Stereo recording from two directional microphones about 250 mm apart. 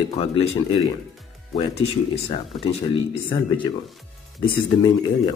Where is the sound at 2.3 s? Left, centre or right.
Left.